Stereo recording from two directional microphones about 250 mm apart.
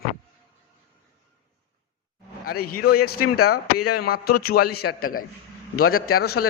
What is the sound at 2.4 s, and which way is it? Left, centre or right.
Speech, left.